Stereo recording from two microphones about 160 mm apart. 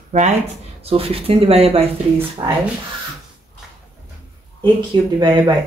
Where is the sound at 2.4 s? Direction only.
25° right (ahead or behind).